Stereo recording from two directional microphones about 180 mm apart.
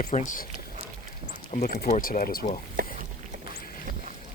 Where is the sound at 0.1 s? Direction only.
35° left (ahead or behind).